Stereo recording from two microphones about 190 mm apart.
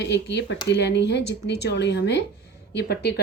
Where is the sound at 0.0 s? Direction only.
65° left (ahead or behind).